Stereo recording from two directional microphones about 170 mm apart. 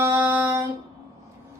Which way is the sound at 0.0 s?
15° right (ahead or behind).